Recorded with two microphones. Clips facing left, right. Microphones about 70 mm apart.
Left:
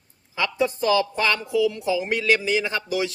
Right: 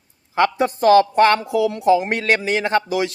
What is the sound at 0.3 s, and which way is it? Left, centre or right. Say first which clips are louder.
Speech: right 6 dB; right.